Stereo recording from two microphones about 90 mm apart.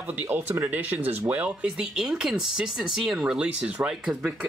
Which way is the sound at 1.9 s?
5° right (ahead or behind).